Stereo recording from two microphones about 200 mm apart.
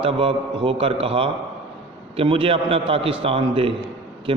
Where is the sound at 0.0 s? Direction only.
25° right (ahead or behind).